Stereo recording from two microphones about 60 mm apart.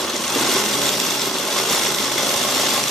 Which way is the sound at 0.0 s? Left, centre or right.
Centre.